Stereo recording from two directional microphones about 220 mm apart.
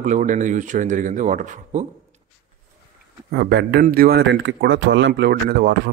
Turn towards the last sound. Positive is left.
turn(degrees=-45)  # may be behind; listen again after turning